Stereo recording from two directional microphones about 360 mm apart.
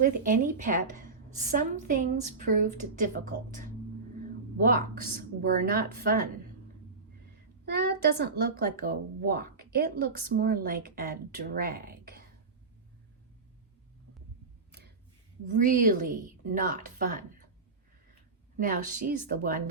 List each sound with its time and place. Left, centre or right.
0.0 s speech: right
4.5 s speech: right
7.6 s speech: right
14.7 s a sound: right
15.5 s speech: right
18.5 s speech: right